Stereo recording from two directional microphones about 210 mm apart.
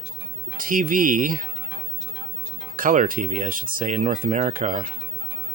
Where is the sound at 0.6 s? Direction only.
40° right (ahead or behind).